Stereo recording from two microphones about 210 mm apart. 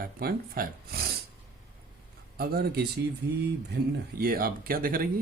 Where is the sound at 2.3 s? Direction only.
45° right (ahead or behind).